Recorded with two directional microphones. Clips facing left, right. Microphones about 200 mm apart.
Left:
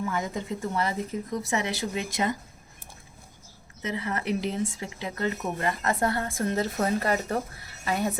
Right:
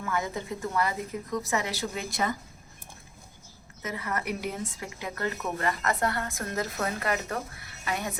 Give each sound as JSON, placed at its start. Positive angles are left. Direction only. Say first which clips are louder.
{"t": 0.0, "sound": "a woman's voice", "louder": "left 1 dB", "side_deg": 20}
{"t": 3.9, "sound": "a woman's voice", "louder": "left 4 dB", "side_deg": 25}